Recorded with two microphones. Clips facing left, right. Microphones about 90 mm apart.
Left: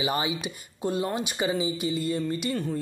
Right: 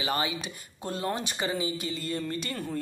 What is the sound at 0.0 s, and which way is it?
Speech, 15° left (ahead or behind).